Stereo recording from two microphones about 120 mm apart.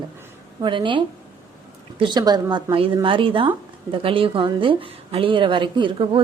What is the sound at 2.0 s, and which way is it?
A woman's voice, 35° right (ahead or behind).